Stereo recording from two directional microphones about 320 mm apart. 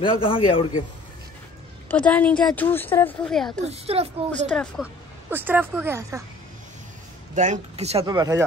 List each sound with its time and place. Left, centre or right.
0.0 s a man's voice: centre
1.9 s speech: centre
3.6 s speech: centre
4.5 s speech: centre
7.3 s speech: right